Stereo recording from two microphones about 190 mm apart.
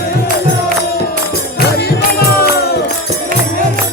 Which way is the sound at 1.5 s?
55° left (ahead or behind).